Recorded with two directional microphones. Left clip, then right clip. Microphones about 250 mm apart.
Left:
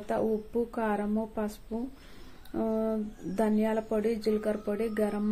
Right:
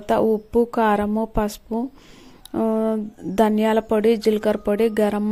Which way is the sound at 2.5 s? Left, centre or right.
Right.